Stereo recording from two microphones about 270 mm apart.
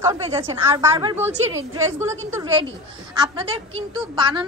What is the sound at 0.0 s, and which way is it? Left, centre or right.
A woman's voice, centre.